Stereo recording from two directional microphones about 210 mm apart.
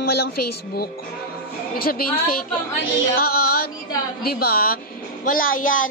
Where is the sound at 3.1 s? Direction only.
45° left (ahead or behind).